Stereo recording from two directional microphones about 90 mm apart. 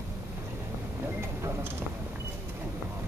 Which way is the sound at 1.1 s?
30° right (ahead or behind).